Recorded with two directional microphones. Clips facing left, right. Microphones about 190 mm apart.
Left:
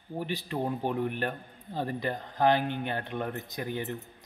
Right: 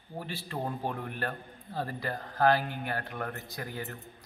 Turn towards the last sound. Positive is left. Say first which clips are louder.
# left 5 dB
turn(degrees=20)  # may be behind; listen again after turning